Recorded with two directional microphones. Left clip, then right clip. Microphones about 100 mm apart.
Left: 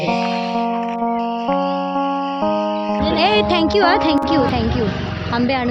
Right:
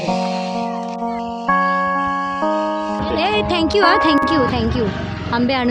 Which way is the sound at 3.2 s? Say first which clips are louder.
Left 3 dB; 20° left (ahead or behind).